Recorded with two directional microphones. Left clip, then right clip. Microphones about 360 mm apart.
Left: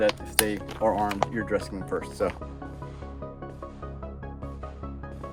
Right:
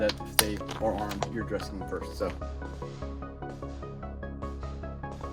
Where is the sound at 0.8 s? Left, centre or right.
Centre.